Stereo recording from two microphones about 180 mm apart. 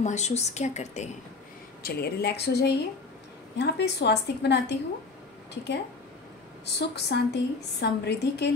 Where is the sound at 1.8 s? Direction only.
60° left (ahead or behind).